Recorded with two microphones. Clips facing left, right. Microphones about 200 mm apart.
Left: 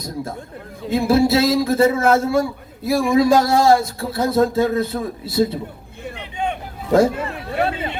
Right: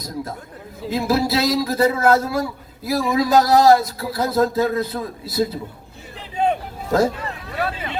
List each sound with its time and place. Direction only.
0.9 s a man's voice: 25° left (ahead or behind)
6.1 s vehicle: 35° right (ahead or behind)
7.6 s chatter: 25° left (ahead or behind)